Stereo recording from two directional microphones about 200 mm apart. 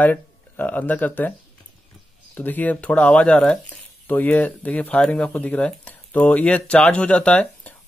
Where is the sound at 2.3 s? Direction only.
10° left (ahead or behind).